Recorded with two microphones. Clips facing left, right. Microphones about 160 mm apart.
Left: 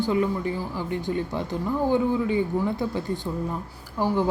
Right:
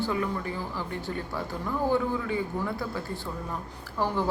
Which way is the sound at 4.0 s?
15° left (ahead or behind).